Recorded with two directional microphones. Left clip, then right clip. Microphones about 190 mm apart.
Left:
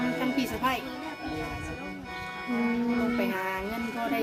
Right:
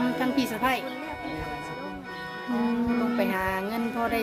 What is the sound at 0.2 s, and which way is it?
Music, 50° right (ahead or behind).